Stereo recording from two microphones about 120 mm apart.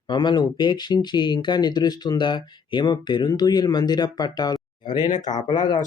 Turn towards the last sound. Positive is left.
turn(degrees=35)  # may be behind; listen again after turning